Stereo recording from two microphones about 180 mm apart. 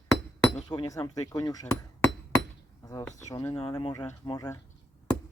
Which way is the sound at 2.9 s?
20° left (ahead or behind).